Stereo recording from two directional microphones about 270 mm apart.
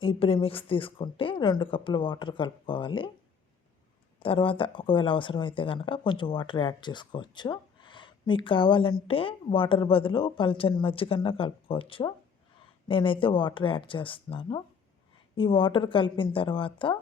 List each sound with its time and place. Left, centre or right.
0.0 s a woman's voice: centre
4.2 s a woman's voice: centre